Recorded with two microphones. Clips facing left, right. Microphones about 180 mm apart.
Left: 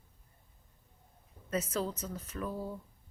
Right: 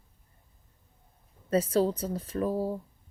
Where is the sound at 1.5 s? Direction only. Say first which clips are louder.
Right 9 dB; 30° right (ahead or behind).